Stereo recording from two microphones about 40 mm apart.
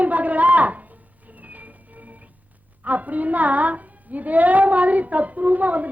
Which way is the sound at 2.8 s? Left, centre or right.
Right.